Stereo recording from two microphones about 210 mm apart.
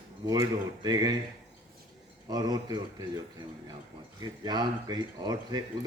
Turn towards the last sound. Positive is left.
turn(degrees=-20)  # may be behind; listen again after turning